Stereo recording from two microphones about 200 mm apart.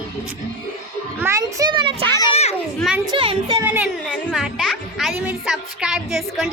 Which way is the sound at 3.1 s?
25° right (ahead or behind).